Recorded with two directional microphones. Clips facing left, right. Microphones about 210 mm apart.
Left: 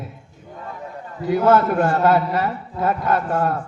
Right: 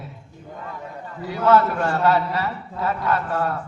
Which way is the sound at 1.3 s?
50° left (ahead or behind).